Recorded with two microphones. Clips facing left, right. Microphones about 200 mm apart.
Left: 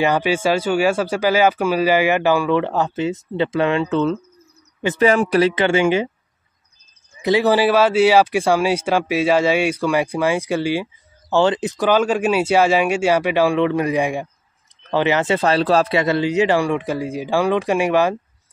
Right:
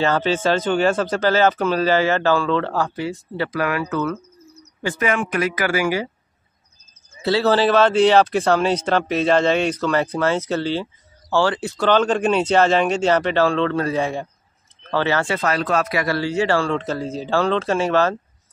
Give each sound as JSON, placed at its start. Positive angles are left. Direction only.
{"t": 0.0, "sound": "a man's voice", "side_deg": 15}
{"t": 7.2, "sound": "speech", "side_deg": 15}